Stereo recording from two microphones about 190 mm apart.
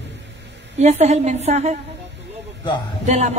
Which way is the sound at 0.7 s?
35° right (ahead or behind).